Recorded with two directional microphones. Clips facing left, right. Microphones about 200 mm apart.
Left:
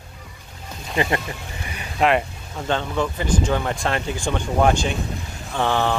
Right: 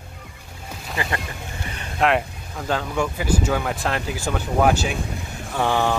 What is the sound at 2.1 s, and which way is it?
Speech, centre (ahead or behind).